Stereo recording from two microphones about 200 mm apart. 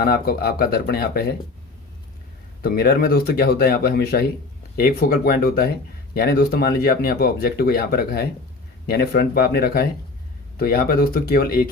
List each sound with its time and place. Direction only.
0.0 s speech: 50° left (ahead or behind)
2.6 s speech: 50° left (ahead or behind)